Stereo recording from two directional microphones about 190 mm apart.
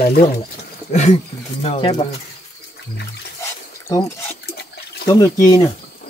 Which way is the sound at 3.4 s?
15° left (ahead or behind).